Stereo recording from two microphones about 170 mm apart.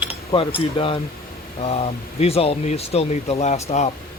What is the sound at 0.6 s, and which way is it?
Speech, 30° left (ahead or behind).